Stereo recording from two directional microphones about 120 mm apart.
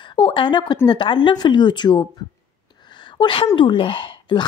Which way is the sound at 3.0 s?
45° left (ahead or behind).